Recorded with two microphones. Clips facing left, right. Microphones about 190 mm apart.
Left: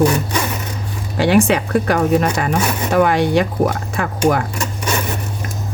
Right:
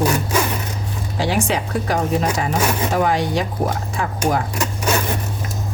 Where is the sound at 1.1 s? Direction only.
65° left (ahead or behind).